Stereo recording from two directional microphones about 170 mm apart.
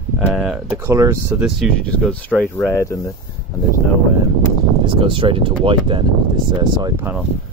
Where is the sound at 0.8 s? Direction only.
15° right (ahead or behind).